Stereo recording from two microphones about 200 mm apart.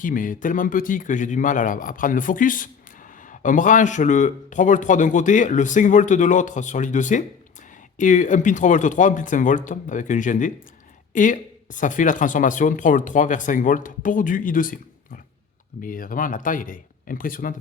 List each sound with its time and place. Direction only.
0.0 s speech: 40° left (ahead or behind)